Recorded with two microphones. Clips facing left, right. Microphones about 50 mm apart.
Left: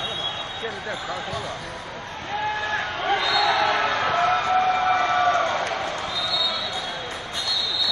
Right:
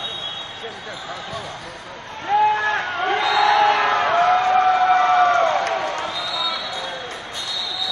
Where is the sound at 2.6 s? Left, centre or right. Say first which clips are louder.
Right 4 dB; right.